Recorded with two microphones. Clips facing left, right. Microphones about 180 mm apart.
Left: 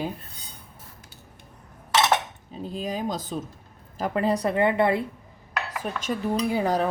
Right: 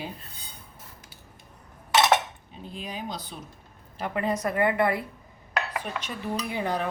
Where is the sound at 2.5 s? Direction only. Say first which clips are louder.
Left 7 dB; 40° left (ahead or behind); by 5.0 s 25° left (ahead or behind).